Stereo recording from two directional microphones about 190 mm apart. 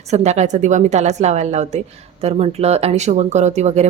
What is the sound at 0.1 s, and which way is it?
Speech, 35° right (ahead or behind).